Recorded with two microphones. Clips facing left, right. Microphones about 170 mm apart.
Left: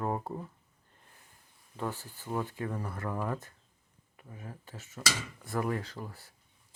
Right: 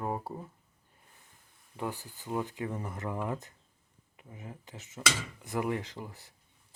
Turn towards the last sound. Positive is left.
turn(degrees=-20)  # may be behind; listen again after turning